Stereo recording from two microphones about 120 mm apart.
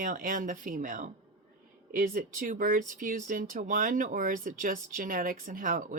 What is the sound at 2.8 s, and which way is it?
Speech, 90° right.